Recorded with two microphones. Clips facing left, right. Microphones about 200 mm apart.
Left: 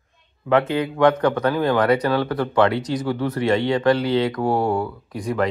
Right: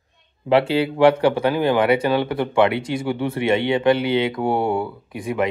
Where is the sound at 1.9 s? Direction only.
25° right (ahead or behind).